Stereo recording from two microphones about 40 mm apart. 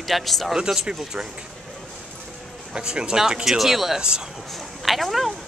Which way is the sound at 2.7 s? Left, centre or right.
Right.